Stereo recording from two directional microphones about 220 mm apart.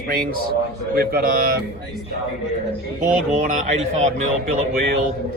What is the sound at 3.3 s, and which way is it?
Speech, 35° right (ahead or behind).